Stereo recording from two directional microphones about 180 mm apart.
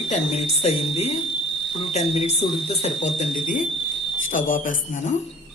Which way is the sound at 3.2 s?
45° left (ahead or behind).